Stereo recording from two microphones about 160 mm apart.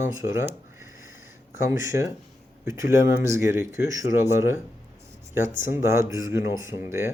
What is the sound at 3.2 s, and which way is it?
Speech, 20° right (ahead or behind).